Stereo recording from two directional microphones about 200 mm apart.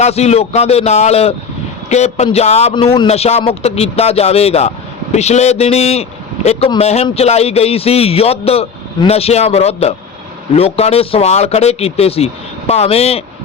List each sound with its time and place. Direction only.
0.0 s a man's voice: 30° left (ahead or behind)